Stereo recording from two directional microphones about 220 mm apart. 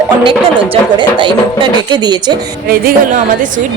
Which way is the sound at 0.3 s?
25° right (ahead or behind).